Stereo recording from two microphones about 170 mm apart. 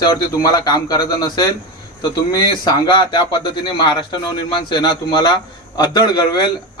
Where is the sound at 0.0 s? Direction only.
20° left (ahead or behind).